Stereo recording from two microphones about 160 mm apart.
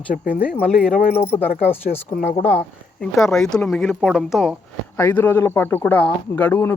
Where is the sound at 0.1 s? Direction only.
70° left (ahead or behind).